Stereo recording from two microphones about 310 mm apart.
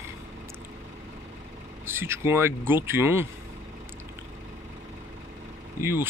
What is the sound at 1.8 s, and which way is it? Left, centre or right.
Speech, centre.